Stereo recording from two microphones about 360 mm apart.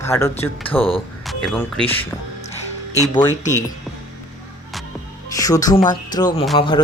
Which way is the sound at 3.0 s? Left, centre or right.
Centre.